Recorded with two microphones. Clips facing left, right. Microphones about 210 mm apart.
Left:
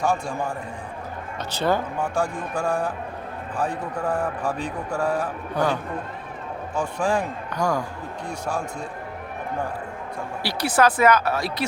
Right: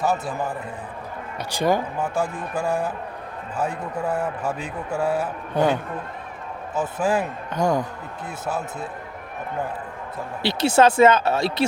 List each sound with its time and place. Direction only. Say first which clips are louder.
0.0 s a man's voice: even; 5° right (ahead or behind)
5.6 s speech: right 3 dB; 25° right (ahead or behind)
6.7 s a man's voice: right 1 dB; 5° right (ahead or behind)
7.5 s speech: right 3 dB; 20° right (ahead or behind)
8.4 s a man's voice: right 1 dB; 5° right (ahead or behind)
10.4 s speech: right 4 dB; 25° right (ahead or behind)